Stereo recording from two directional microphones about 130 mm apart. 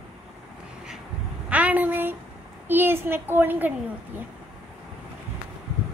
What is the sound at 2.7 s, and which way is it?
A woman's voice, 15° right (ahead or behind).